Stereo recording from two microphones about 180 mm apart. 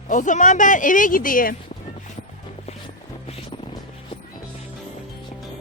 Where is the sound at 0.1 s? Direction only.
45° left (ahead or behind).